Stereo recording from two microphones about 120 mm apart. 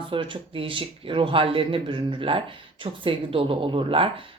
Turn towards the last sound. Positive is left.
turn(degrees=-45)  # may be behind; listen again after turning